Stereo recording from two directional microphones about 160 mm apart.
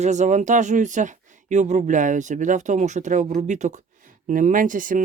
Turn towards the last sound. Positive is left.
turn(degrees=-55)  # may be behind; listen again after turning